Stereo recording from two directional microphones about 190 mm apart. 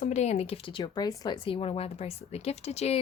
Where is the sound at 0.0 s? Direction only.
35° left (ahead or behind).